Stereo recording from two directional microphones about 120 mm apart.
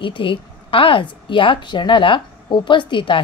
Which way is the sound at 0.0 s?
45° left (ahead or behind).